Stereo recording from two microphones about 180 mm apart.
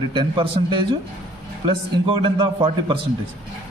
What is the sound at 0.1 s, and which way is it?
A man's voice, 25° right (ahead or behind).